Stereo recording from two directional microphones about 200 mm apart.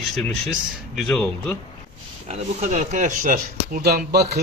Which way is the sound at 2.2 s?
35° right (ahead or behind).